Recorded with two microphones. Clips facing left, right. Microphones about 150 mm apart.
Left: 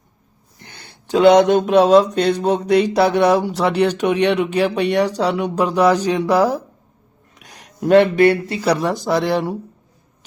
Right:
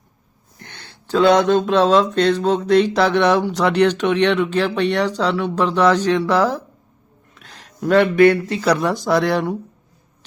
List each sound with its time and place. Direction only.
0.6 s speech: 10° left (ahead or behind)
7.3 s a sound: 15° left (ahead or behind)
7.8 s speech: 20° left (ahead or behind)
8.6 s speech: 5° left (ahead or behind)